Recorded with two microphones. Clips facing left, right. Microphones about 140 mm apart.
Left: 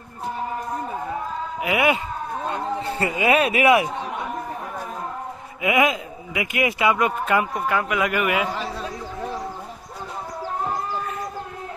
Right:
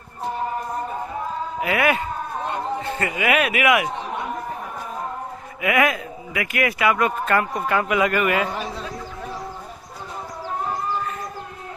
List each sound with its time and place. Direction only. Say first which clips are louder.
1.6 s a man's voice: even; 20° left (ahead or behind)
3.0 s speech: left 2 dB; 30° left (ahead or behind)
5.6 s a man's voice: even; 20° left (ahead or behind)
7.5 s a man's voice: right 2 dB; centre (ahead or behind)